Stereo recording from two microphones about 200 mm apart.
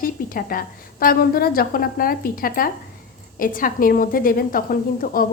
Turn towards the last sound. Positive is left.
turn(degrees=45)  # may be behind; listen again after turning